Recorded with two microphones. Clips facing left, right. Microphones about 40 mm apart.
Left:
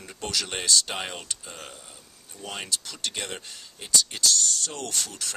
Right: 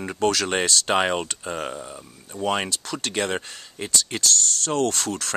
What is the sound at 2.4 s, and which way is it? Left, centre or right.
Speech, right.